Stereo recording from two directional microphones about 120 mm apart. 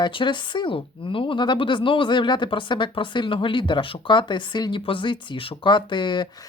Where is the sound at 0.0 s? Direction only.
45° left (ahead or behind).